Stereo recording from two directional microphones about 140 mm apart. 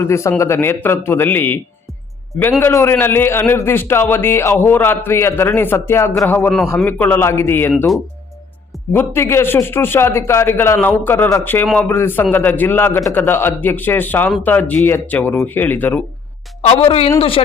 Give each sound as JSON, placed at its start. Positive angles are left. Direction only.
{"t": 0.0, "sound": "a man's voice", "side_deg": 20}
{"t": 8.9, "sound": "a man's voice", "side_deg": 15}
{"t": 11.6, "sound": "a man's voice", "side_deg": 5}
{"t": 11.9, "sound": "a man's voice", "side_deg": 15}
{"t": 16.6, "sound": "a woman's voice", "side_deg": 50}